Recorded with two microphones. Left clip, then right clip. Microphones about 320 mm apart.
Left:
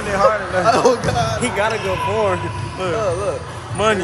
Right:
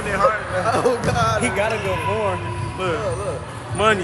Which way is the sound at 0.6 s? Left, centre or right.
Left.